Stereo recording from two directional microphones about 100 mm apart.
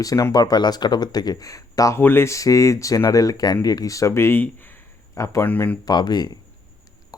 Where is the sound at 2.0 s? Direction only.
20° left (ahead or behind).